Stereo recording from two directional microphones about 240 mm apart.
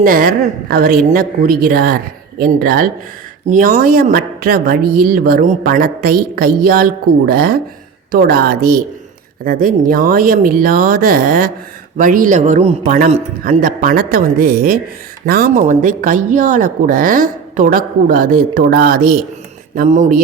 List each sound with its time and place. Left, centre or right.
0.0 s a woman's voice: right